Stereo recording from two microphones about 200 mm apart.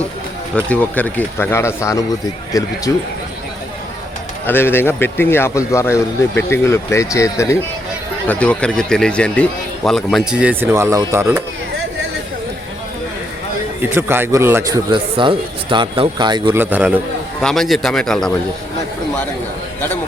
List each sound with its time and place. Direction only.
0.5 s speech: 5° left (ahead or behind)
4.4 s speech: 10° left (ahead or behind); by 11.4 s 15° right (ahead or behind)
13.9 s a man's voice: 10° right (ahead or behind)
14.8 s speech: 25° right (ahead or behind)
16.6 s a man's voice: 10° right (ahead or behind)